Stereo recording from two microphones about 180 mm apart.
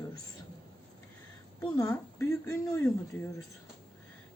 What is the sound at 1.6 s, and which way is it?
A woman's voice, 15° left (ahead or behind).